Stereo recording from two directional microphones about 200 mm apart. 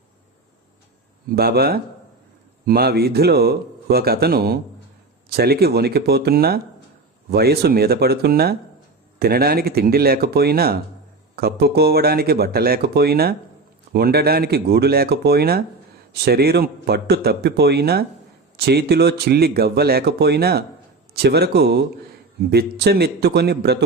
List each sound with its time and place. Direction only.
1.3 s speech: 50° right (ahead or behind)